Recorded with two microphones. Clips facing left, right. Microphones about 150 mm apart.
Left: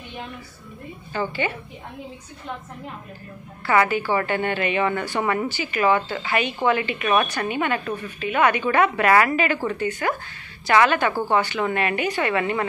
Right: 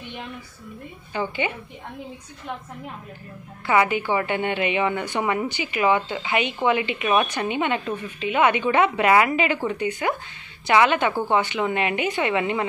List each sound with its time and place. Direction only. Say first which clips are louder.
1.1 s a woman's voice: left 1 dB; 15° right (ahead or behind)
3.6 s a woman's voice: even; 15° right (ahead or behind)